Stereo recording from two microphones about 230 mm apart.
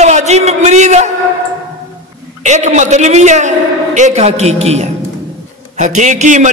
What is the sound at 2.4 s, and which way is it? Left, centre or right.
A man's voice, right.